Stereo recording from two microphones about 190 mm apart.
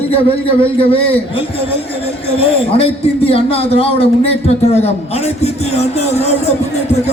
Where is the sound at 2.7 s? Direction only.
30° left (ahead or behind).